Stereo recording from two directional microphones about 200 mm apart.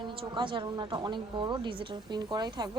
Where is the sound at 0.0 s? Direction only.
25° right (ahead or behind).